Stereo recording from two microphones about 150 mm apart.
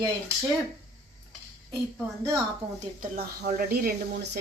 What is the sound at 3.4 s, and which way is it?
Speech, 90° right.